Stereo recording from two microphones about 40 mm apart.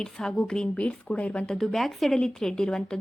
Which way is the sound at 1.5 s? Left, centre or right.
Centre.